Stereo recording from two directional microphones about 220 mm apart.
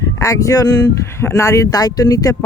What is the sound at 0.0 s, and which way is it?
Speech, 15° left (ahead or behind).